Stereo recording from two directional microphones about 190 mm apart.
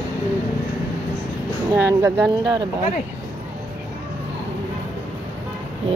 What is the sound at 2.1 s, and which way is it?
Speech, centre (ahead or behind).